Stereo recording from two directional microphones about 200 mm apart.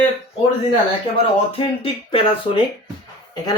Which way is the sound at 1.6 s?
25° left (ahead or behind).